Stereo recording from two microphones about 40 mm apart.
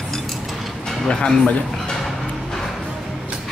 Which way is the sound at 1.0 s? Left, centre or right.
Centre.